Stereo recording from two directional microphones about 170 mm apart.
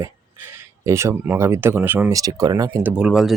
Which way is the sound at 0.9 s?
15° right (ahead or behind).